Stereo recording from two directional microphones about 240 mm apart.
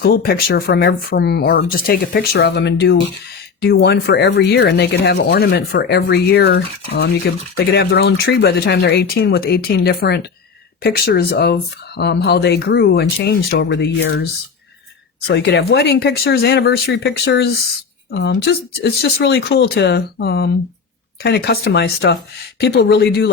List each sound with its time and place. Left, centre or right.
0.0 s speech: left
15.3 s speech: left